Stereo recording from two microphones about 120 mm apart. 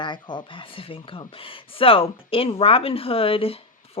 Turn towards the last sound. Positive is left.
turn(degrees=50)  # may be behind; listen again after turning